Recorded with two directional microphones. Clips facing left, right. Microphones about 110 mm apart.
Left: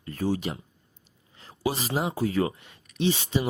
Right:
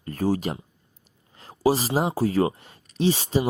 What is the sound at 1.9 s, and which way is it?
Speech, 35° right (ahead or behind).